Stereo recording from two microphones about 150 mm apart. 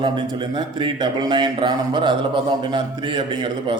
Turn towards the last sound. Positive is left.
turn(degrees=-30)  # may be behind; listen again after turning